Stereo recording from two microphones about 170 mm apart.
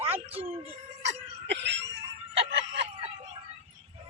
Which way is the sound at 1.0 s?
90° right.